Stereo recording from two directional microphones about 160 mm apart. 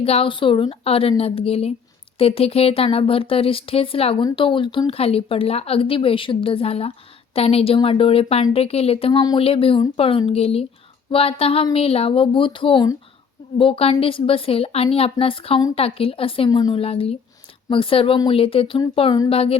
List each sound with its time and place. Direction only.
0.0 s speech: 35° left (ahead or behind)
16.5 s a woman's voice: 25° left (ahead or behind)
16.8 s speech: 40° left (ahead or behind)